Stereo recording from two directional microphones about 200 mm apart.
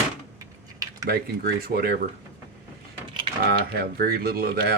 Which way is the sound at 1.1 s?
50° right (ahead or behind).